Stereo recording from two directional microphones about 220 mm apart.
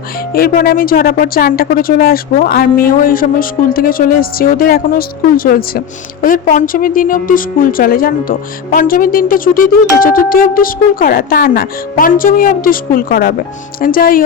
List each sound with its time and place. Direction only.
0.3 s a woman's voice: 40° left (ahead or behind)